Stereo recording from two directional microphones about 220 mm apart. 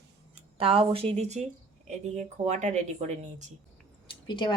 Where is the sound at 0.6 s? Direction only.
25° right (ahead or behind).